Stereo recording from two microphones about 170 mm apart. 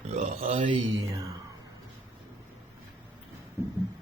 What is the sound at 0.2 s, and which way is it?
Speech, 35° right (ahead or behind).